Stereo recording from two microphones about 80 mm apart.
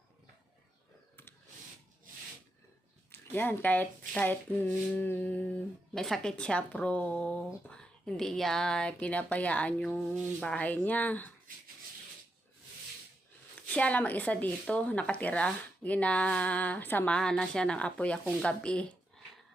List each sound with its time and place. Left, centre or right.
3.1 s speech: left
5.9 s speech: centre
13.6 s speech: centre
17.1 s speech: centre